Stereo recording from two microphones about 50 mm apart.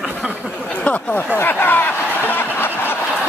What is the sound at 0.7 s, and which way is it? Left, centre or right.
Speech, left.